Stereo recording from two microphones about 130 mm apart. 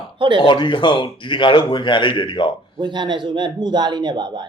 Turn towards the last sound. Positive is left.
turn(degrees=-35)  # may be behind; listen again after turning